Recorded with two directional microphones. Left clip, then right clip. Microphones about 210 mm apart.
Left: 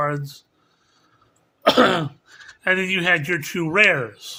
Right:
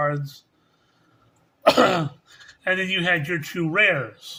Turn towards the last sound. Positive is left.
turn(degrees=25)  # may be behind; listen again after turning